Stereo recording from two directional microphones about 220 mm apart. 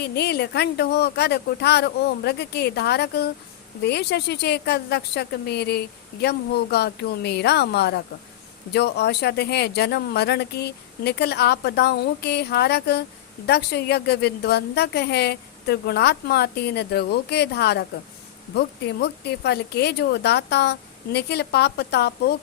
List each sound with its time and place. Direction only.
0.0 s speech: 50° left (ahead or behind)